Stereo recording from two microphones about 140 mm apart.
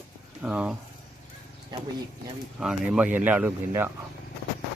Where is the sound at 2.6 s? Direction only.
10° right (ahead or behind).